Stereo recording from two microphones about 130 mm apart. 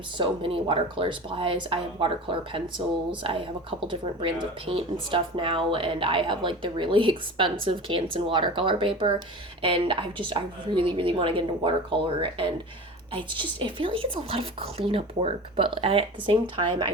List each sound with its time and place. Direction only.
0.2 s speech: 40° right (ahead or behind)